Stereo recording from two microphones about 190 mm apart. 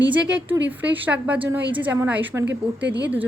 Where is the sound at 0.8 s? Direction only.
10° right (ahead or behind).